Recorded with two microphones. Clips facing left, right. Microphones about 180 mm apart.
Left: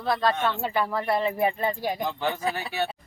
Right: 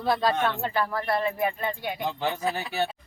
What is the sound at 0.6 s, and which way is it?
Speech, 15° left (ahead or behind).